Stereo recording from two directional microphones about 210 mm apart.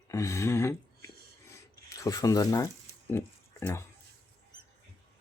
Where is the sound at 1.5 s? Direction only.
15° left (ahead or behind).